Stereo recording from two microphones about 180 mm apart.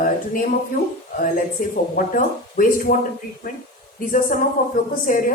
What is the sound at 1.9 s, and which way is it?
Speech, 50° left (ahead or behind).